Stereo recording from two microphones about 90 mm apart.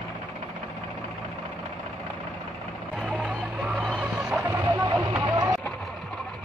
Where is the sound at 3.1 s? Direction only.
5° right (ahead or behind).